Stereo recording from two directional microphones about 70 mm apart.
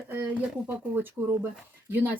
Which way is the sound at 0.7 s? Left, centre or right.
Right.